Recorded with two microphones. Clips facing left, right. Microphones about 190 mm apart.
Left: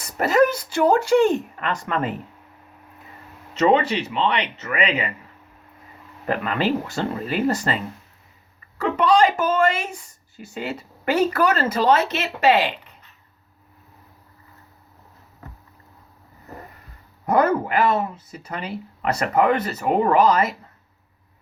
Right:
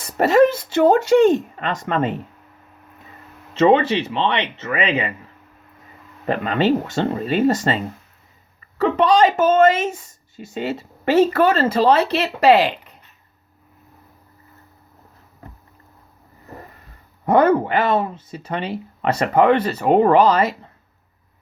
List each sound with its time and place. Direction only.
0.0 s speech: 25° right (ahead or behind)
3.5 s speech: 25° right (ahead or behind)
6.2 s speech: 25° right (ahead or behind)
9.0 s speech: 25° right (ahead or behind)
17.2 s speech: 25° right (ahead or behind)